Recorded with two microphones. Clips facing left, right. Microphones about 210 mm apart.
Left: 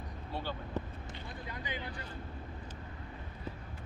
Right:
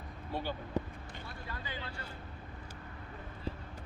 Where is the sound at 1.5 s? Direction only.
15° left (ahead or behind).